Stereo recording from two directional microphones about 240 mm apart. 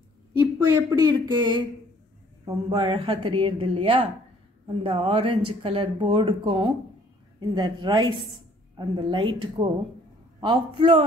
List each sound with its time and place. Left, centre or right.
0.4 s speech: centre